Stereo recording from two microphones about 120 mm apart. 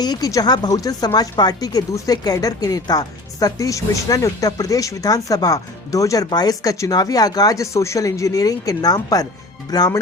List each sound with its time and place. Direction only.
0.0 s speech: 30° left (ahead or behind)